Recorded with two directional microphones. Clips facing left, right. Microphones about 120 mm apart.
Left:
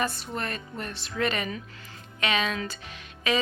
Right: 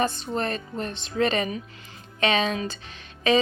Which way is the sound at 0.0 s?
30° right (ahead or behind).